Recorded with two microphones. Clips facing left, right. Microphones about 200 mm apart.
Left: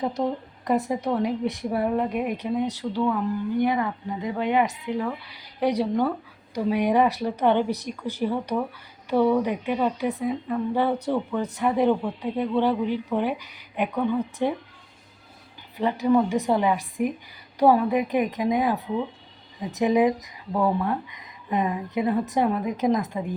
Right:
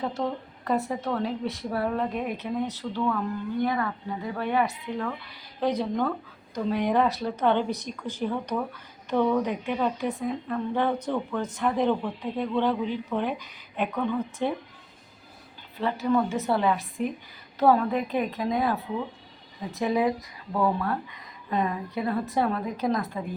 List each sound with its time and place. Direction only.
0.0 s a woman's voice: 15° left (ahead or behind)
15.8 s a woman's voice: 15° left (ahead or behind)
19.8 s a woman's voice: 15° left (ahead or behind)